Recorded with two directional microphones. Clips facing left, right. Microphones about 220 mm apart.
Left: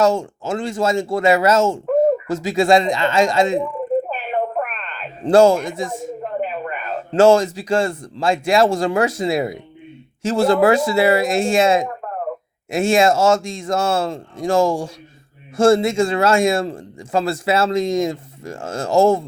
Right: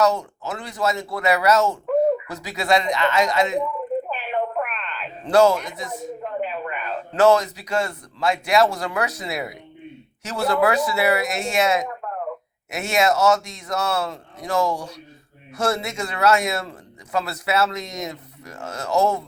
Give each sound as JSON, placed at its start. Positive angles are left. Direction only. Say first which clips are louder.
{"t": 0.4, "sound": "speech", "louder": "left 5 dB", "side_deg": 25}
{"t": 1.9, "sound": "a sound", "louder": "left 3 dB", "side_deg": 45}
{"t": 2.4, "sound": "speech", "louder": "left 8 dB", "side_deg": 25}
{"t": 4.1, "sound": "a sound", "louder": "left 3 dB", "side_deg": 45}
{"t": 5.2, "sound": "speech", "louder": "left 4 dB", "side_deg": 30}
{"t": 5.5, "sound": "speech", "louder": "left 7 dB", "side_deg": 50}
{"t": 5.9, "sound": "a sound", "louder": "left 3 dB", "side_deg": 50}
{"t": 7.1, "sound": "speech", "louder": "left 4 dB", "side_deg": 25}
{"t": 14.7, "sound": "speech", "louder": "left 6 dB", "side_deg": 50}
{"t": 15.5, "sound": "speech", "louder": "left 10 dB", "side_deg": 30}